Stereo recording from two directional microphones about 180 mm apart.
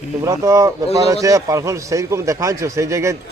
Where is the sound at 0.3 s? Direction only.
15° right (ahead or behind).